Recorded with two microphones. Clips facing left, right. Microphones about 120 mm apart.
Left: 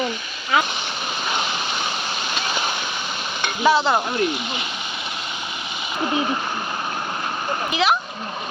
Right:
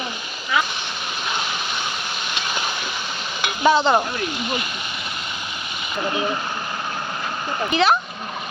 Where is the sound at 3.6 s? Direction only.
Centre (ahead or behind).